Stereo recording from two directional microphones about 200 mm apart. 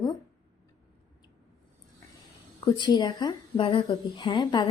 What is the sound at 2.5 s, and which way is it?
A woman's voice, 20° left (ahead or behind).